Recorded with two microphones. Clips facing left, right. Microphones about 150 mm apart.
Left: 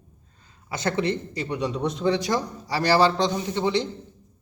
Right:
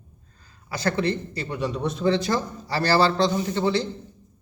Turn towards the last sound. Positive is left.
turn(degrees=15)  # may be behind; listen again after turning